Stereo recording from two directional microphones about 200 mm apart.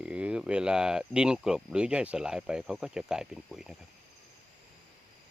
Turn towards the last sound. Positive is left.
turn(degrees=-5)  # may be behind; listen again after turning